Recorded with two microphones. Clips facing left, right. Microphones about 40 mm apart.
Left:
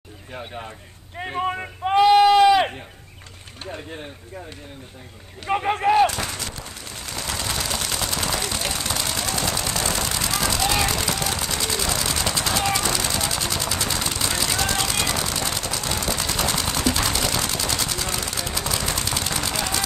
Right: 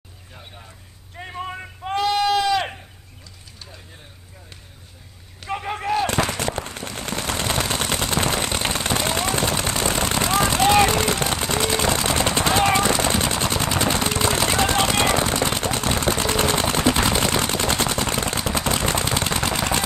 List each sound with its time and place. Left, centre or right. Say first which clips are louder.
1.4 s a sound: left 7 dB; centre
3.6 s speech: left 13 dB; left
5.4 s speech: left 6 dB; centre
6.0 s machine gun: right 3 dB; right